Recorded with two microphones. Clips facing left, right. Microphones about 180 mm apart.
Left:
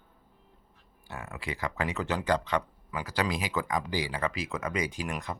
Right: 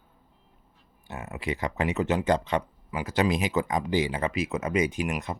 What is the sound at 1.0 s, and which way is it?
Speech, 20° right (ahead or behind).